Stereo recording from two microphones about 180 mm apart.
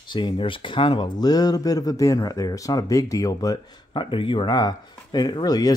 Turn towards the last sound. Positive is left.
turn(degrees=20)  # may be behind; listen again after turning